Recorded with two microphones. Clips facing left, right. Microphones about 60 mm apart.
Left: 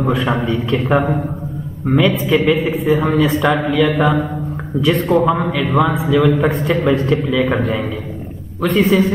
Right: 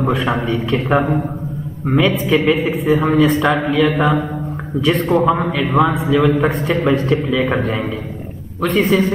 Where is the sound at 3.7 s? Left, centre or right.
Centre.